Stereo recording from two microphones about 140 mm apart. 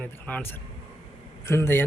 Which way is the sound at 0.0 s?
10° left (ahead or behind).